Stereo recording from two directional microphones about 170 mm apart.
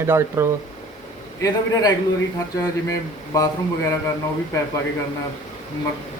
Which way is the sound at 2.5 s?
20° left (ahead or behind).